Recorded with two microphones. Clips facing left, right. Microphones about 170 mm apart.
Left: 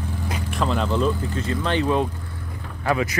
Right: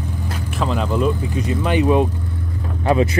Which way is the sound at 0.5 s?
Centre (ahead or behind).